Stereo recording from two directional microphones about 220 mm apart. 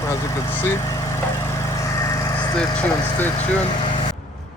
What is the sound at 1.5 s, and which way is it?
Lawn mower, 15° left (ahead or behind).